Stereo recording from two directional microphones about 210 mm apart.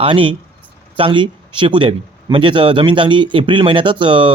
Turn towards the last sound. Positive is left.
turn(degrees=-25)  # may be behind; listen again after turning